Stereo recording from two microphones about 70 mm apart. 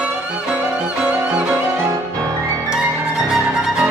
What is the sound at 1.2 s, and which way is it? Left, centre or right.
Violin, centre.